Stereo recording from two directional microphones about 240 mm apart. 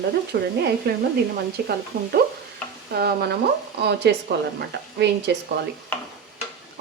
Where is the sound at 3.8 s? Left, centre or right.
Right.